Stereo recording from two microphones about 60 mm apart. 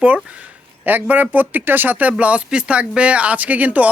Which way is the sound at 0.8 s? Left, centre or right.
Right.